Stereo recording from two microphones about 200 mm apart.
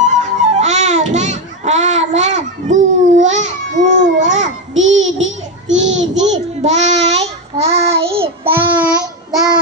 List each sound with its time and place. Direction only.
0.0 s music: 35° right (ahead or behind)
4.7 s child singing: 70° right (ahead or behind)
5.9 s child singing: 35° right (ahead or behind)